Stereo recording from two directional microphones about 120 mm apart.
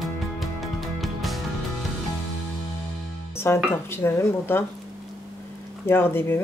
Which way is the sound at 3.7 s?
20° left (ahead or behind).